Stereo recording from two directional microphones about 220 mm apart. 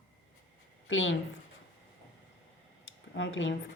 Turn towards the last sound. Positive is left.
turn(degrees=60)  # may be behind; listen again after turning